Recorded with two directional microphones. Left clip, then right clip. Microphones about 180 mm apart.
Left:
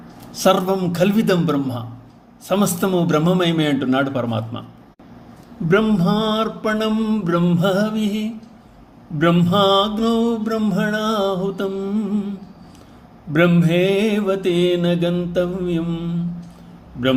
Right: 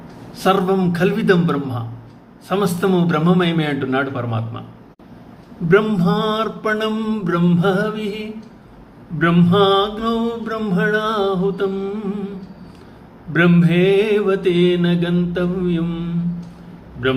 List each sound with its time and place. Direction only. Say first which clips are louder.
0.3 s mantra: even; 50° left (ahead or behind)
5.6 s mantra: right 2 dB; 45° left (ahead or behind)
13.3 s mantra: even; 50° left (ahead or behind)